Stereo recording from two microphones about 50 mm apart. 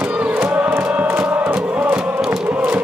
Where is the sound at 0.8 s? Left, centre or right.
Right.